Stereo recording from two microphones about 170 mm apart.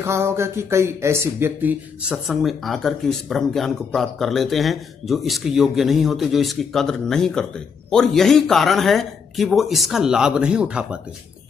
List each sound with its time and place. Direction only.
0.0 s speech: 15° right (ahead or behind)